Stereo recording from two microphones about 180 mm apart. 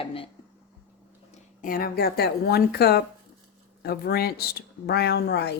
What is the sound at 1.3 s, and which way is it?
Speech, 50° left (ahead or behind).